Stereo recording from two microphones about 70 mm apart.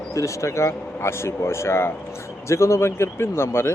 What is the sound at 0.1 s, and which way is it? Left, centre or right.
Speech, left.